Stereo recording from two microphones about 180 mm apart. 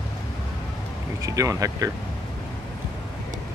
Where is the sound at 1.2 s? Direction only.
20° right (ahead or behind).